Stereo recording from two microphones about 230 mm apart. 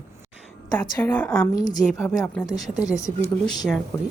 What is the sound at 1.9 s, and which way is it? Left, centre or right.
Speech, centre.